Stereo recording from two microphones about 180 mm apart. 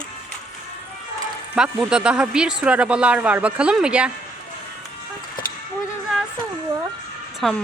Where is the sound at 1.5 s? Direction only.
5° right (ahead or behind).